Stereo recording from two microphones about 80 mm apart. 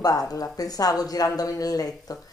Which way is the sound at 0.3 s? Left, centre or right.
Left.